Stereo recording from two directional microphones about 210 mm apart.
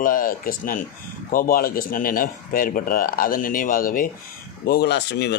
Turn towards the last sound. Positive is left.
turn(degrees=55)  # may be behind; listen again after turning